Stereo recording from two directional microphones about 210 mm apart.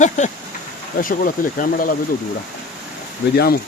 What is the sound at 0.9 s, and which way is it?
Speech, 40° left (ahead or behind).